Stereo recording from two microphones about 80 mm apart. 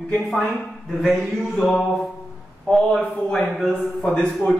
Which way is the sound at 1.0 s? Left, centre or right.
Centre.